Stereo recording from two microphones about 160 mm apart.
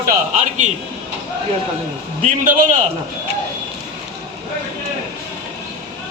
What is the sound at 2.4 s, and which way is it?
Speech, 55° right (ahead or behind).